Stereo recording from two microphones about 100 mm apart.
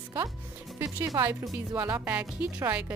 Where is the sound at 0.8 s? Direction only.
35° right (ahead or behind).